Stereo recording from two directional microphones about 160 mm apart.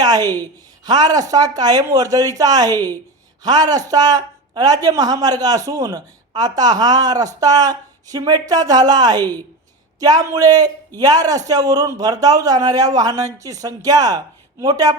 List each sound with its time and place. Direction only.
0.0 s speech: 25° right (ahead or behind)